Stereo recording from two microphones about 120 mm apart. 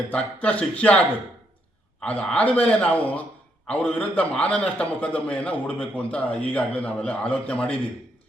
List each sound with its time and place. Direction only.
0.1 s speech: 10° left (ahead or behind)